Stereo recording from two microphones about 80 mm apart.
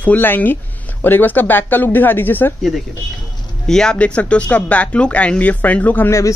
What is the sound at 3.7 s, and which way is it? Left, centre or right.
Speech, centre.